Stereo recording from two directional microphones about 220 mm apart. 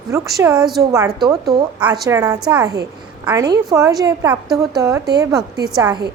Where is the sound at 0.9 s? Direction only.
15° right (ahead or behind).